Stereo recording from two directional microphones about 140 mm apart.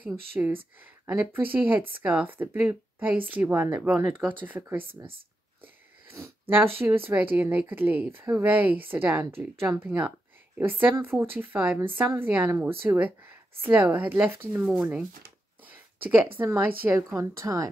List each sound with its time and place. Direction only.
0.0 s a woman's voice: 15° right (ahead or behind)
4.8 s speech: 40° right (ahead or behind)
6.0 s a sound: 20° right (ahead or behind)
6.5 s a woman's voice: 15° right (ahead or behind)